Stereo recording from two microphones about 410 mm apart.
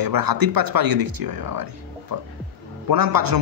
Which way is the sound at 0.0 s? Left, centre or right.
Right.